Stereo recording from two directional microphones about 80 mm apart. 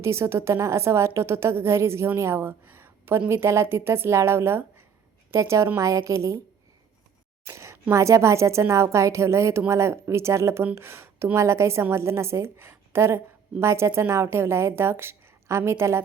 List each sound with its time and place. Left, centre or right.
0.0 s a woman's voice: right
7.4 s a sound: right
7.9 s a woman's voice: right